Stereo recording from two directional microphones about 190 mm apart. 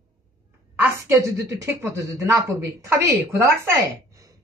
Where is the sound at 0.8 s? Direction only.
15° right (ahead or behind).